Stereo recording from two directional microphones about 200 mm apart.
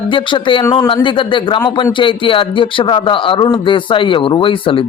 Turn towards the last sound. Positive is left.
turn(degrees=25)  # may be behind; listen again after turning